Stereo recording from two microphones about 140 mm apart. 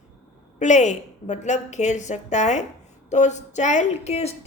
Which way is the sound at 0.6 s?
60° left (ahead or behind).